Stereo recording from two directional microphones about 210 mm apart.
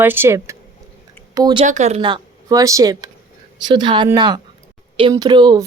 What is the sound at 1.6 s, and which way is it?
Speech, 35° right (ahead or behind).